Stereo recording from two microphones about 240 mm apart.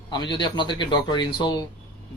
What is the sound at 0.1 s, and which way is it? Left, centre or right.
Speech, centre.